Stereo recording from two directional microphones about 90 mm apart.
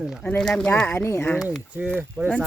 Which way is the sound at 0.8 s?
25° left (ahead or behind).